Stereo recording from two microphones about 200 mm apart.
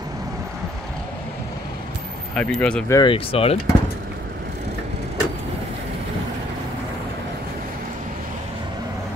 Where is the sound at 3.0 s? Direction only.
25° left (ahead or behind).